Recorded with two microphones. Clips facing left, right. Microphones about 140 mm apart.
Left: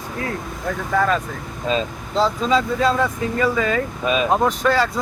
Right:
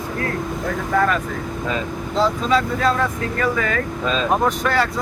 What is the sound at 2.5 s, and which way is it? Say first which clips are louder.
Speech: even; 15° left (ahead or behind).